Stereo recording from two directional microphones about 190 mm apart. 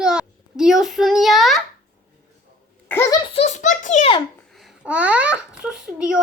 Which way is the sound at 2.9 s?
15° left (ahead or behind).